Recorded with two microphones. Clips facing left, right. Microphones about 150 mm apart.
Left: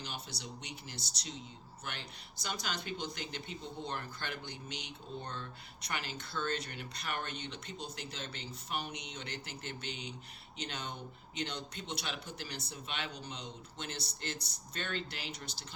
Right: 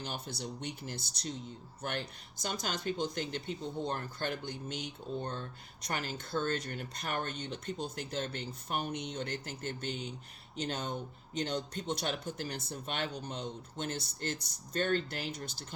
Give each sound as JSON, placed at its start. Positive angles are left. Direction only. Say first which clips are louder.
{"t": 0.0, "sound": "speech", "louder": "right 5 dB", "side_deg": -50}